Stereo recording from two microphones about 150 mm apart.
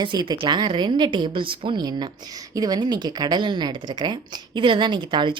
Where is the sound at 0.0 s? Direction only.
30° right (ahead or behind).